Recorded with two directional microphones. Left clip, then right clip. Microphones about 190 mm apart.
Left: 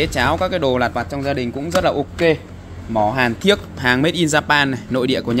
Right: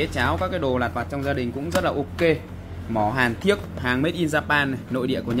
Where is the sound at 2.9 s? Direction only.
20° left (ahead or behind).